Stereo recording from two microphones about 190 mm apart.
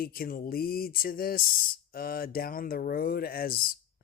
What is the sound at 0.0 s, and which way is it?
Speech, 50° left (ahead or behind).